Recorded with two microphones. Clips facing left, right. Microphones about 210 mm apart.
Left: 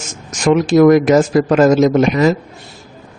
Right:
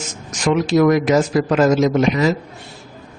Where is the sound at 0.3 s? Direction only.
45° left (ahead or behind).